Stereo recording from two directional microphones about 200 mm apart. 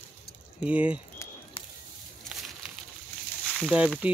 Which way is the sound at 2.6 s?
5° right (ahead or behind).